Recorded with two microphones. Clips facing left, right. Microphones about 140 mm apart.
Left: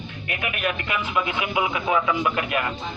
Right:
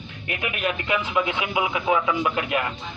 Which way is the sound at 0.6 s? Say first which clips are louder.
Right 2 dB; 20° right (ahead or behind).